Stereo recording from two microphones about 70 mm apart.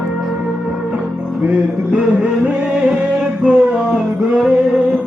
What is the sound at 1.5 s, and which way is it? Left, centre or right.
Music, centre.